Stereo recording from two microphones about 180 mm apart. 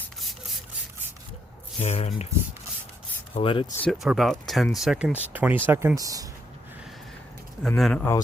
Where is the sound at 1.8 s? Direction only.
35° left (ahead or behind).